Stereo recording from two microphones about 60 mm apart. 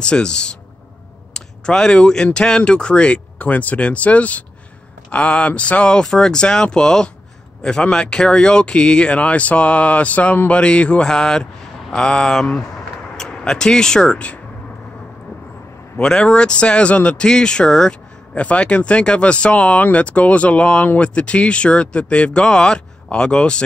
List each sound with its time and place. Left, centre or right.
0.0 s speech: centre
12.5 s a sound: centre
16.0 s speech: centre
18.3 s speech: left